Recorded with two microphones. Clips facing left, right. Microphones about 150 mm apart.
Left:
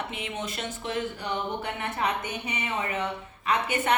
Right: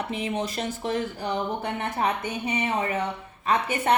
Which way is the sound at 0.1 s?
35° right (ahead or behind).